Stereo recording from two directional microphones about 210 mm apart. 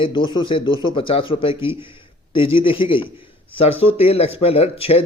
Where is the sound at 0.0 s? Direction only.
25° left (ahead or behind).